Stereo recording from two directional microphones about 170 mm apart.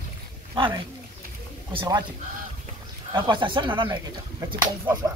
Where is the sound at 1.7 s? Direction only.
30° right (ahead or behind).